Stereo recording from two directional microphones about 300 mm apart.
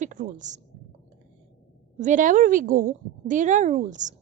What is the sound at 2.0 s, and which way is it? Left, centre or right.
A woman's voice, right.